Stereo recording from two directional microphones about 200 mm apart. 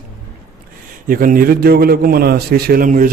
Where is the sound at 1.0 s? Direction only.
45° right (ahead or behind).